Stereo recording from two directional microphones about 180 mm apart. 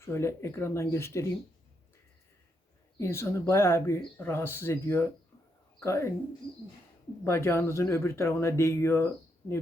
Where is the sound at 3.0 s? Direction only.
15° left (ahead or behind).